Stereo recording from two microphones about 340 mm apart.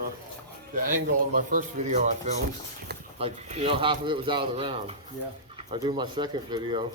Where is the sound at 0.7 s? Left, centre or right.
Right.